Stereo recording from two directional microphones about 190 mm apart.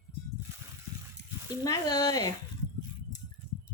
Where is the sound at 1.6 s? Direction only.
20° left (ahead or behind).